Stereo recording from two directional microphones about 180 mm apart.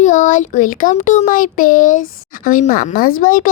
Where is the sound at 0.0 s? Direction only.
45° left (ahead or behind).